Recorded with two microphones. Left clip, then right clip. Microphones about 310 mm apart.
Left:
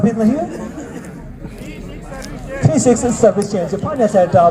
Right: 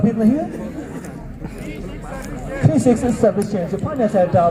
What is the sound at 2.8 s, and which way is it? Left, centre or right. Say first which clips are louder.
Speech: left 4 dB; left.